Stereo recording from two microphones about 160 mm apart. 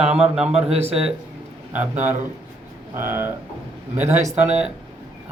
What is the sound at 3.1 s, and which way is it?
Speech, 15° right (ahead or behind).